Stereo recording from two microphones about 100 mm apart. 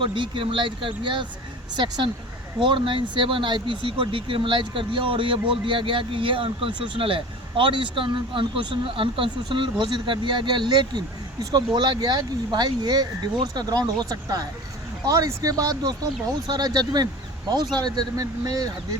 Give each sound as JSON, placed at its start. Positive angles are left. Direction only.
{"t": 0.0, "sound": "speech", "side_deg": -55}